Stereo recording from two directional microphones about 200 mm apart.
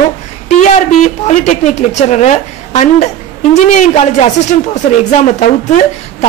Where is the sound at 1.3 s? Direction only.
35° left (ahead or behind).